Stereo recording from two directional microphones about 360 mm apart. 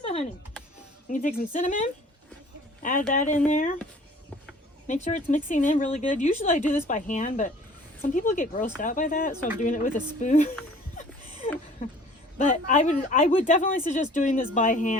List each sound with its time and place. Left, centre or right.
0.0 s typing: centre
1.1 s a woman's voice: left
3.1 s a woman's voice: left
4.9 s a woman's voice: left
12.4 s a woman's voice: centre